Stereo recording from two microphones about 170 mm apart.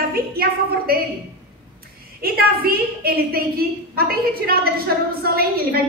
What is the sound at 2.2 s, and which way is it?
A woman's voice, 65° right (ahead or behind).